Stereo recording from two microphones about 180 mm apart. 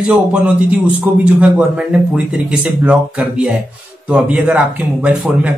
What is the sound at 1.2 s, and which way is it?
A man's voice, 5° right (ahead or behind).